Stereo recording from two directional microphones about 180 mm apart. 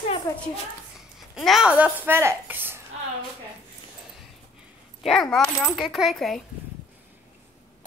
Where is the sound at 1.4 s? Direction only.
Centre (ahead or behind).